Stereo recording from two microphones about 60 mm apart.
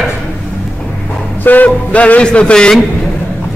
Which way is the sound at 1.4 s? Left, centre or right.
Left.